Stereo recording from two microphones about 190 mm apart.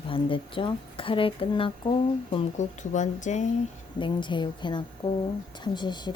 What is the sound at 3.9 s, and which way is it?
A woman's voice, 25° left (ahead or behind).